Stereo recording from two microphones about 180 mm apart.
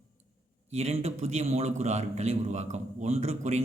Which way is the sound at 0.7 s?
35° right (ahead or behind).